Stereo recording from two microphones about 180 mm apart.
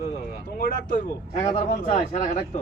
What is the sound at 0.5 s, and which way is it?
Speech, 55° left (ahead or behind).